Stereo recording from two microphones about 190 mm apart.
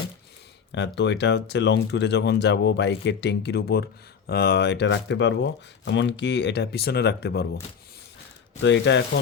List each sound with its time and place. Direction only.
0.9 s speech: 65° left (ahead or behind)
8.6 s speech: 70° left (ahead or behind)